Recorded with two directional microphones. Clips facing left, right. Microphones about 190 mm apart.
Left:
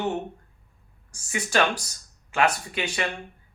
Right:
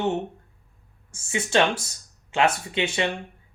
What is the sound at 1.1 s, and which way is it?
Speech, 25° right (ahead or behind).